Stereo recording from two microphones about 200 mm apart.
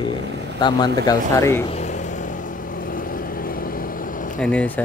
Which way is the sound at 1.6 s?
35° left (ahead or behind).